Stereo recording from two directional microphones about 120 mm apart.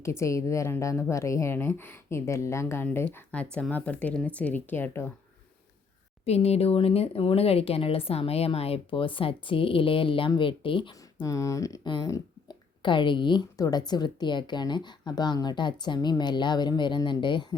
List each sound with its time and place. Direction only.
0.0 s a woman's voice: 25° left (ahead or behind)
6.2 s speech: 60° left (ahead or behind); by 11.3 s 45° left (ahead or behind)
11.3 s a woman's voice: 25° left (ahead or behind)